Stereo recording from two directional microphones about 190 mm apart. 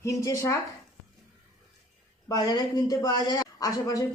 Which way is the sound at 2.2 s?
20° left (ahead or behind).